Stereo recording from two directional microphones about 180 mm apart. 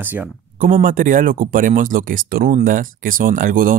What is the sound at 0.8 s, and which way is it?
Speech, 45° right (ahead or behind).